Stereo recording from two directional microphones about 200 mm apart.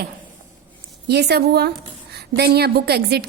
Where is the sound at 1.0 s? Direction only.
55° right (ahead or behind).